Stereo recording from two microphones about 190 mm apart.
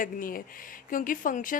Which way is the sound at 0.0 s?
45° left (ahead or behind).